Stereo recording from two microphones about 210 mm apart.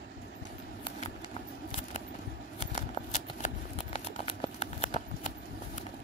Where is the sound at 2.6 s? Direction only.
35° left (ahead or behind).